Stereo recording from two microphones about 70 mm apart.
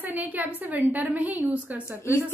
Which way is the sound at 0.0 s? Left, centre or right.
Right.